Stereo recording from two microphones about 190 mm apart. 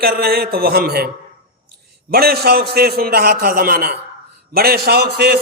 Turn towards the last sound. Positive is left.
turn(degrees=-55)  # may be behind; listen again after turning